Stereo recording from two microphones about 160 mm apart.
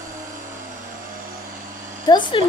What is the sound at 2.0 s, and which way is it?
Speech, 30° left (ahead or behind).